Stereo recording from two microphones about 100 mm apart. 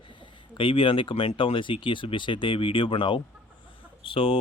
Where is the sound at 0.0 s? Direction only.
55° left (ahead or behind).